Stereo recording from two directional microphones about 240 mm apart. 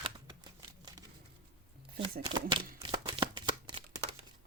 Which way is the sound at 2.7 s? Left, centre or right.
Centre.